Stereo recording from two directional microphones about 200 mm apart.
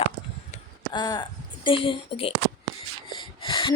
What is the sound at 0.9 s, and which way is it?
A woman's voice, 20° left (ahead or behind).